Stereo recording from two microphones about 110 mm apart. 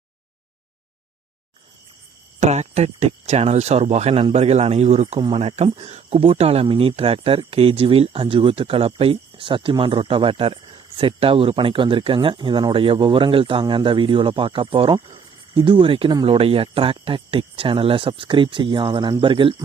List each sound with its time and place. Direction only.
2.4 s speech: 90° right; by 5.6 s 70° right (ahead or behind)
5.7 s speech: 80° right; by 19.5 s 50° right (ahead or behind)